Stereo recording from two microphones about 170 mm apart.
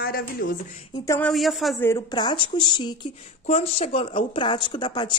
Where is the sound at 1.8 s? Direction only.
20° left (ahead or behind).